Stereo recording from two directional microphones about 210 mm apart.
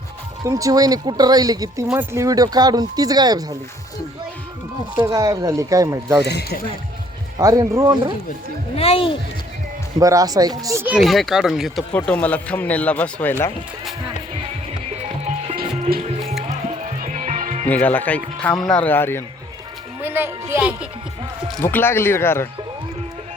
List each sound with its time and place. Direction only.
0.4 s speech: 15° right (ahead or behind)
4.9 s speech: 15° right (ahead or behind)
6.2 s speech: 50° left (ahead or behind)
7.3 s speech: 15° right (ahead or behind)
8.7 s speech: 30° left (ahead or behind)
10.0 s speech: 15° right (ahead or behind); by 13.3 s 5° left (ahead or behind)
17.0 s music: 35° right (ahead or behind)
17.7 s speech: 10° left (ahead or behind)
20.0 s speech: 10° right (ahead or behind)
21.6 s speech: 10° left (ahead or behind)